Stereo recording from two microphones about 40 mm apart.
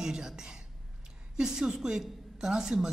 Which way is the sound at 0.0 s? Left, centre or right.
Centre.